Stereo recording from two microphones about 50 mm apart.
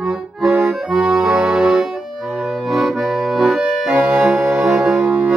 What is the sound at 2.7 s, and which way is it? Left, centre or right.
Accordion, centre.